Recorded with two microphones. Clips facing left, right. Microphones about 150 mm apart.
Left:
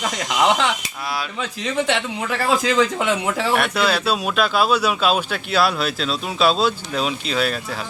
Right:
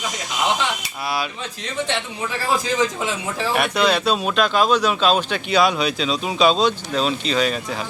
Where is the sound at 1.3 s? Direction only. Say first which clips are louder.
Left 4 dB; 90° left; by 3.5 s 70° left (ahead or behind).